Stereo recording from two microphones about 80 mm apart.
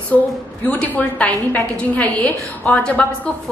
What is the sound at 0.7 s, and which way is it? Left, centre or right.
A woman's voice, centre.